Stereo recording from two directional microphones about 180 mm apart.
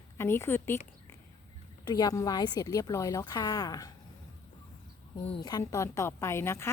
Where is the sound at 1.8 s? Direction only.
20° left (ahead or behind).